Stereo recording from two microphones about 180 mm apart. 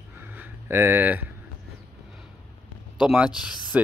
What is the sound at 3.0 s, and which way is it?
Speech, 5° right (ahead or behind).